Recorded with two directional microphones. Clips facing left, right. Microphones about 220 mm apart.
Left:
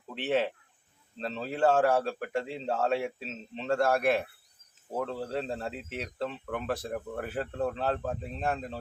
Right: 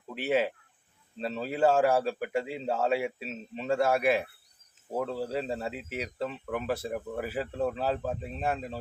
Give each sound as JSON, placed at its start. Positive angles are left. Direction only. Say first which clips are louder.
{"t": 0.1, "sound": "speech", "louder": "right 1 dB", "side_deg": -5}